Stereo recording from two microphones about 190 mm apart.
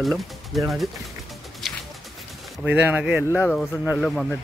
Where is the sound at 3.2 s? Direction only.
10° left (ahead or behind).